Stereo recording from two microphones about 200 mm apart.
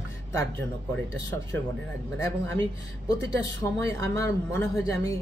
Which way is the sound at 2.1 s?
10° left (ahead or behind).